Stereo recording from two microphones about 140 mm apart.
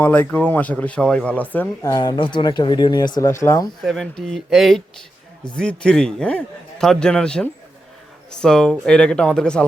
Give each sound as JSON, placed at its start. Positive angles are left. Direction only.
{"t": 0.0, "sound": "speech", "side_deg": 10}
{"t": 1.8, "sound": "speech", "side_deg": 25}
{"t": 3.2, "sound": "speech", "side_deg": 20}
{"t": 3.8, "sound": "a man's voice", "side_deg": 5}